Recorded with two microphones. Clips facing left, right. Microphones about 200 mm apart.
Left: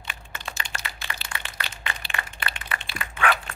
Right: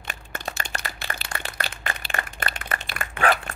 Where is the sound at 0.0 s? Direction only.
45° right (ahead or behind).